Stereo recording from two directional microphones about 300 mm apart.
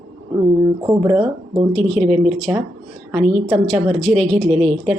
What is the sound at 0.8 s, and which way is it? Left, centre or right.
Speech, centre.